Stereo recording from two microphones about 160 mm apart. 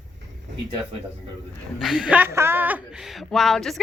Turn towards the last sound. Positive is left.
turn(degrees=0)  # may be behind; listen again after turning